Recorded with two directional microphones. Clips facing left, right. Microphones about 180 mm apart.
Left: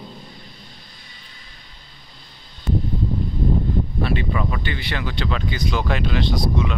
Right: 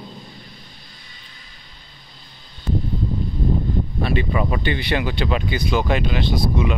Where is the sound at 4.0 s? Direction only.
15° right (ahead or behind).